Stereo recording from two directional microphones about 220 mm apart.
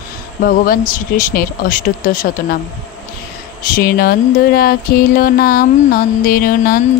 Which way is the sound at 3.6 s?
40° left (ahead or behind).